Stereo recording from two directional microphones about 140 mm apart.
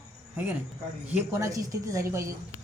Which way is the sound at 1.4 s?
25° right (ahead or behind).